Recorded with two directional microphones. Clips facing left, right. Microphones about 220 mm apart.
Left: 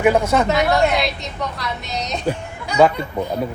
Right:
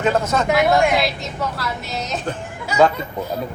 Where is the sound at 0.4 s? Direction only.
5° right (ahead or behind).